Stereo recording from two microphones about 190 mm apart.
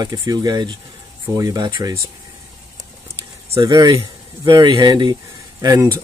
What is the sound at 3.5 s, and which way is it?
Speech, 15° right (ahead or behind).